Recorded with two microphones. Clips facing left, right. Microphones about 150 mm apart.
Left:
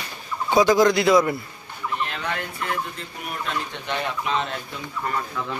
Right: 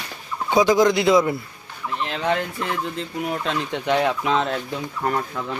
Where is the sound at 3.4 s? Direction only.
90° right.